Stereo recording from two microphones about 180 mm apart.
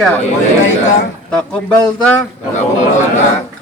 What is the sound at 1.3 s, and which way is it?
Speech, 5° left (ahead or behind).